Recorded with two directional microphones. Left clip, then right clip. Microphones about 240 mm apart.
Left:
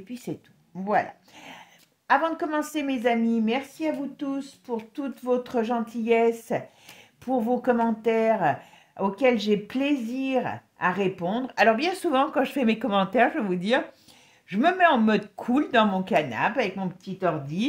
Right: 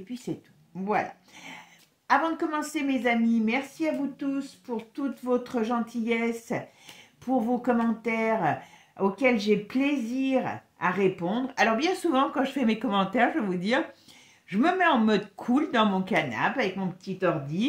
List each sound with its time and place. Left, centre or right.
0.1 s speech: left